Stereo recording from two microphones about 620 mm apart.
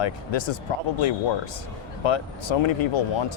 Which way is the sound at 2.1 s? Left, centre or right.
Left.